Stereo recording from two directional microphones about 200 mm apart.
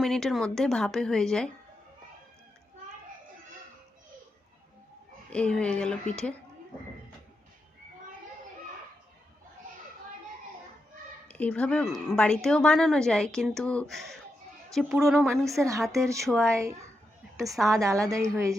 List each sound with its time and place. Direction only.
0.0 s a woman's voice: centre (ahead or behind)
5.3 s a woman's voice: 5° left (ahead or behind)
11.3 s a woman's voice: 5° left (ahead or behind)
15.6 s a woman's voice: 15° right (ahead or behind)
16.2 s a woman's voice: 5° left (ahead or behind)
17.7 s a woman's voice: 15° right (ahead or behind)